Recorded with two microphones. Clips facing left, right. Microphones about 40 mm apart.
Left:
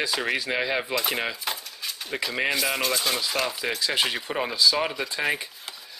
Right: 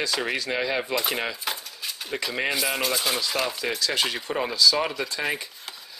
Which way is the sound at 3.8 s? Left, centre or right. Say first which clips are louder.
Left 1 dB; centre.